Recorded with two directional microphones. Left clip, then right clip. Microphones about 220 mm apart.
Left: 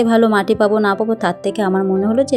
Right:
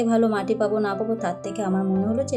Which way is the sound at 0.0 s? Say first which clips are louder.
Left 8 dB; 35° left (ahead or behind).